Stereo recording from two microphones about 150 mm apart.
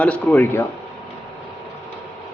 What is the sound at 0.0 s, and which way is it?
Speech, 10° left (ahead or behind).